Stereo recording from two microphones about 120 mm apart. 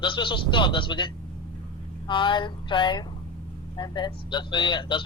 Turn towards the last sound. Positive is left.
turn(degrees=40)  # may be behind; listen again after turning